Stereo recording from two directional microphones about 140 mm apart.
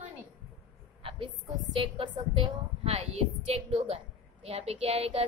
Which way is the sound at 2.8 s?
45° right (ahead or behind).